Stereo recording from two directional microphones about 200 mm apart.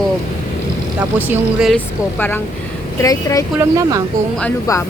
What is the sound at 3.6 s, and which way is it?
Speech, 15° right (ahead or behind).